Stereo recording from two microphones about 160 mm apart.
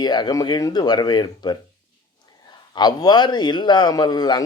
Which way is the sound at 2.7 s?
25° left (ahead or behind).